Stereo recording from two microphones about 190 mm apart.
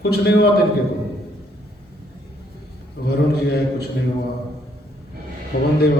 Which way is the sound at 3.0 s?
55° left (ahead or behind).